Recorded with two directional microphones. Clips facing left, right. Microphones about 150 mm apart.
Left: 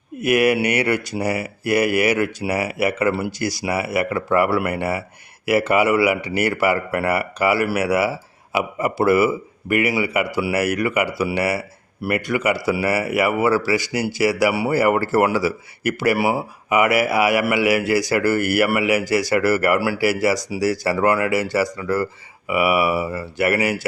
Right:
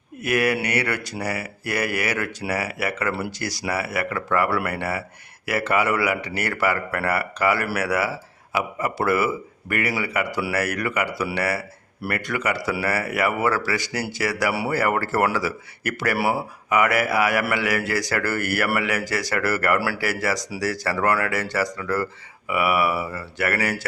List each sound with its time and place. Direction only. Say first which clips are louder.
0.2 s speech: left 5 dB; 15° left (ahead or behind)
19.8 s speech: left 5 dB; 20° left (ahead or behind)
20.1 s speech: left 6 dB; 10° left (ahead or behind)